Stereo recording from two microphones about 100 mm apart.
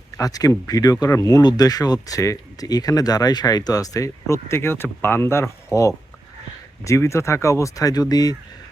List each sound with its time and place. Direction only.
0.2 s speech: 40° left (ahead or behind)